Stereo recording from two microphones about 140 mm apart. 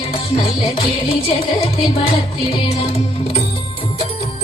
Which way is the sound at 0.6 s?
40° left (ahead or behind).